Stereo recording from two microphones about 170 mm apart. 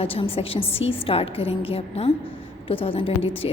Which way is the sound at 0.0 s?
35° left (ahead or behind).